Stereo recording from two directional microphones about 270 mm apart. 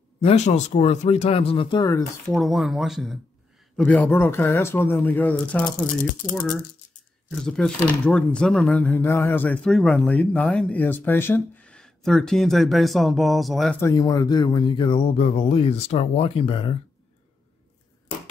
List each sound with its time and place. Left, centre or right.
0.2 s speech: left
2.3 s speech: centre
7.2 s speech: centre